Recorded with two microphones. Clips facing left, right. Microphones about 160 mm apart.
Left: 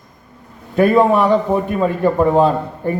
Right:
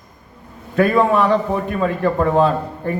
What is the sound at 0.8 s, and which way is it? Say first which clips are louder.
A man's voice: left 3 dB; 20° left (ahead or behind).